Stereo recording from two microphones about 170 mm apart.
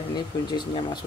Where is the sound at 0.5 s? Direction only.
25° left (ahead or behind).